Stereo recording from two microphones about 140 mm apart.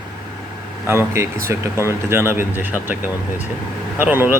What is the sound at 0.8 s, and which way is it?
Speech, 20° right (ahead or behind).